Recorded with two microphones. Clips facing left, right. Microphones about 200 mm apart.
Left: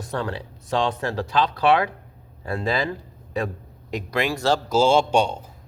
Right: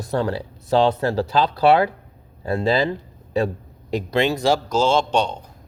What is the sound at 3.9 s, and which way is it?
Speech, 25° right (ahead or behind).